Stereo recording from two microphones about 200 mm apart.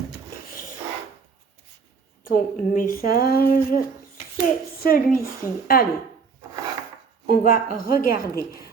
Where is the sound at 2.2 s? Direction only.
45° left (ahead or behind).